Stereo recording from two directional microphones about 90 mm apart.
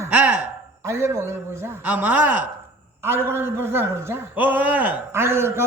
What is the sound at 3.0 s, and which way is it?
A man's voice, 30° right (ahead or behind).